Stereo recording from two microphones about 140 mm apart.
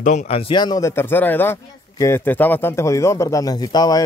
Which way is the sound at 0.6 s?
25° left (ahead or behind).